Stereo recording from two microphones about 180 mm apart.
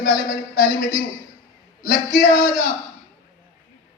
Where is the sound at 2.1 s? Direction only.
50° left (ahead or behind).